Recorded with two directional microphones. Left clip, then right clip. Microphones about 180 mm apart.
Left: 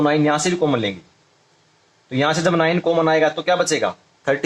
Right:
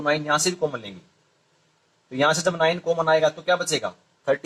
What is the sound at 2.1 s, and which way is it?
Speech, 25° left (ahead or behind).